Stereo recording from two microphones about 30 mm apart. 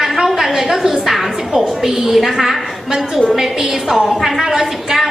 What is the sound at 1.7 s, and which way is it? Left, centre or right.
Speech, centre.